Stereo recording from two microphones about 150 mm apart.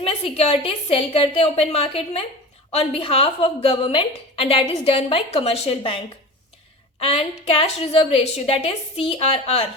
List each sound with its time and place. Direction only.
0.0 s a woman's voice: 40° left (ahead or behind)
7.0 s a woman's voice: 40° left (ahead or behind)